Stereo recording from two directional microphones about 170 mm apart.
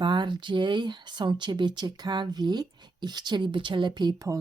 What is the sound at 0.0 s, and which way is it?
Speech, 25° right (ahead or behind).